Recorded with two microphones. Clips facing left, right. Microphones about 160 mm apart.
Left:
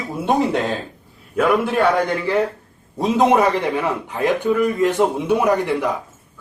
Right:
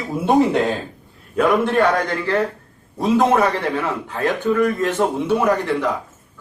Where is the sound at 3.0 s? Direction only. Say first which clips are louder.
Even; 20° left (ahead or behind).